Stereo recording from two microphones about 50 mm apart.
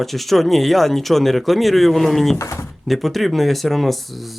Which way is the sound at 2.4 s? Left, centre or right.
Left.